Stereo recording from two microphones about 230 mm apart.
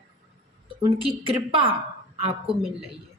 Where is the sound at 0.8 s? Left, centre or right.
Right.